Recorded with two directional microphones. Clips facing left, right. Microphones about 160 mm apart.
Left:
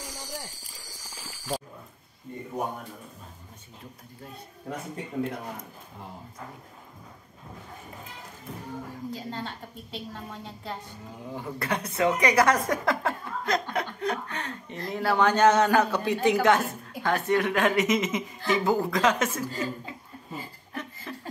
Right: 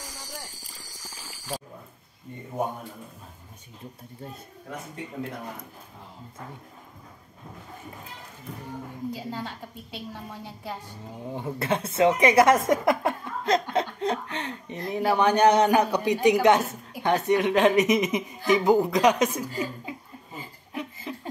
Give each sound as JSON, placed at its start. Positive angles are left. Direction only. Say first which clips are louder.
{"t": 9.1, "sound": "a woman's voice", "louder": "right 1 dB", "side_deg": -10}
{"t": 11.2, "sound": "a woman's voice", "louder": "right 4 dB", "side_deg": -25}